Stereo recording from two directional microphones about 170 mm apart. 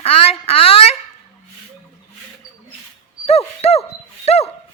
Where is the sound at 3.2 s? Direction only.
35° left (ahead or behind).